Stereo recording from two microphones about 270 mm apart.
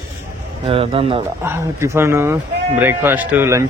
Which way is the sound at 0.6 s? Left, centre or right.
Centre.